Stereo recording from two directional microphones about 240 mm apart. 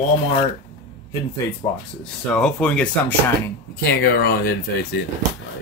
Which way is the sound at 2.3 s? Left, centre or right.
Centre.